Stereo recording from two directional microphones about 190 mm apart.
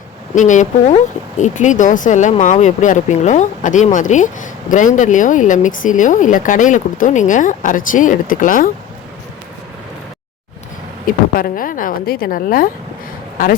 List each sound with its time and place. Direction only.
0.3 s speech: 40° left (ahead or behind)
11.0 s a woman's voice: 50° left (ahead or behind)